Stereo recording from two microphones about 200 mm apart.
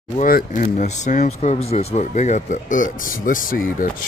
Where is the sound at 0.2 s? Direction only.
45° left (ahead or behind).